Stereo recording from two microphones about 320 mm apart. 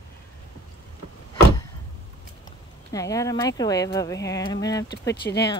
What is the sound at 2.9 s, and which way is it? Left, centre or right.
Speech, centre.